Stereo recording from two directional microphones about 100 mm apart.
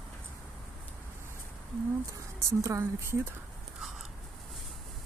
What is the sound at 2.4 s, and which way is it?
Speech, 30° right (ahead or behind).